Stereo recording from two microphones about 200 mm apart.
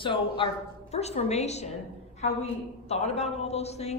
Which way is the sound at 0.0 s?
25° left (ahead or behind).